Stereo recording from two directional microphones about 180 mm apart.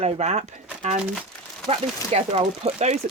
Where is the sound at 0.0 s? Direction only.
35° right (ahead or behind).